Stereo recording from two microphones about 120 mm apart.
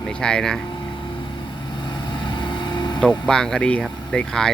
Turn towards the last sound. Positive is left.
turn(degrees=5)  # may be behind; listen again after turning